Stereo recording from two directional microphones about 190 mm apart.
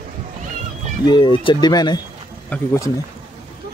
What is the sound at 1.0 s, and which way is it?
Speech, 25° left (ahead or behind).